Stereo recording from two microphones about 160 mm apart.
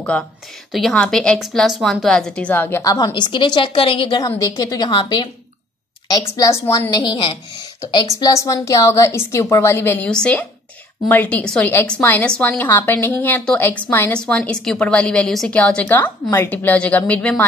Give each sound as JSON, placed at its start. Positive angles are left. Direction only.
{"t": 0.7, "sound": "a woman's voice", "side_deg": 0}
{"t": 4.4, "sound": "a woman's voice", "side_deg": 25}
{"t": 6.9, "sound": "a woman's voice", "side_deg": 30}
{"t": 8.1, "sound": "a woman's voice", "side_deg": 20}